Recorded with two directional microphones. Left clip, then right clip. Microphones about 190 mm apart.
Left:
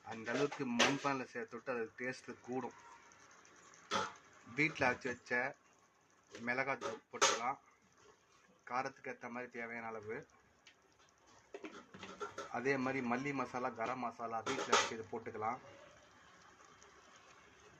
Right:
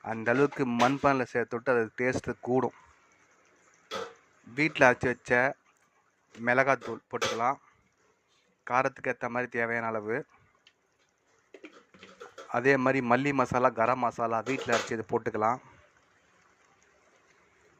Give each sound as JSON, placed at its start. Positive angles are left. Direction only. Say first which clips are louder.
{"t": 0.0, "sound": "speech", "louder": "right 12 dB", "side_deg": -40}
{"t": 4.5, "sound": "speech", "louder": "right 12 dB", "side_deg": -35}
{"t": 8.6, "sound": "speech", "louder": "right 13 dB", "side_deg": -40}
{"t": 12.5, "sound": "speech", "louder": "right 13 dB", "side_deg": -40}